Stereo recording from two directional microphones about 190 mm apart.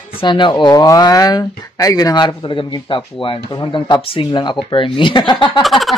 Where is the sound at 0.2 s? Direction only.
25° left (ahead or behind).